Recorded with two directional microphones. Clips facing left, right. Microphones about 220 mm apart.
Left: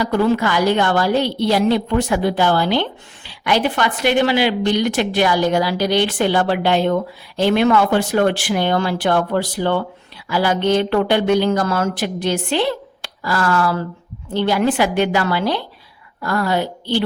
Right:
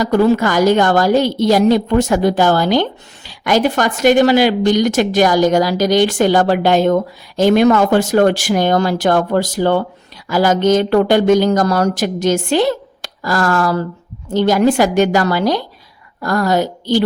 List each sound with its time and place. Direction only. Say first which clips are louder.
0.0 s a woman's voice: right 4 dB; 40° right (ahead or behind)